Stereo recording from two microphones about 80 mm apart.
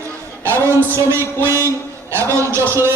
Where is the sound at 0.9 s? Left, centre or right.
Right.